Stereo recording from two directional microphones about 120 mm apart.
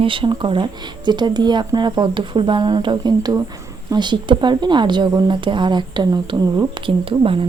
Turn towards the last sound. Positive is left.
turn(degrees=-45)  # may be behind; listen again after turning